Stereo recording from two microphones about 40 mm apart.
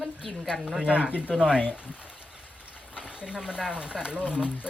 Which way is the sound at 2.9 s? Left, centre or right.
Right.